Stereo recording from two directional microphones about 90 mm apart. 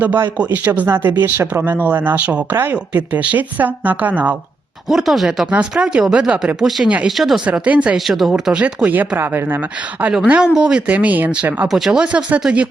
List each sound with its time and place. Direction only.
0.0 s speech: 20° right (ahead or behind)
4.9 s speech: 5° right (ahead or behind)
7.4 s speech: 15° right (ahead or behind)
7.9 s speech: centre (ahead or behind)
8.5 s speech: 15° right (ahead or behind)
11.7 s speech: 5° right (ahead or behind)